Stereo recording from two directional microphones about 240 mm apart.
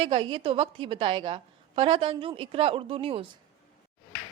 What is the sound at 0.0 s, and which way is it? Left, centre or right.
A woman's voice, right.